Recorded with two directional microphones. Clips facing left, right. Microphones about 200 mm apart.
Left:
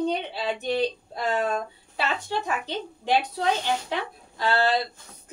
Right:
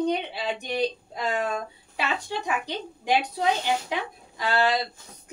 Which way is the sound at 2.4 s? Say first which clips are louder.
Even; 15° right (ahead or behind).